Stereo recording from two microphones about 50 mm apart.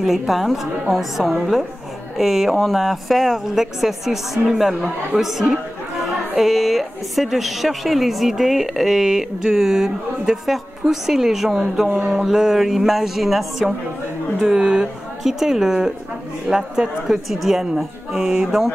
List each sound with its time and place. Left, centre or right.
0.0 s a woman's voice: centre
14.5 s speech: centre
15.2 s speech: centre